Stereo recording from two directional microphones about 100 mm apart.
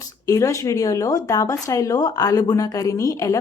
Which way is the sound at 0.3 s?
30° left (ahead or behind).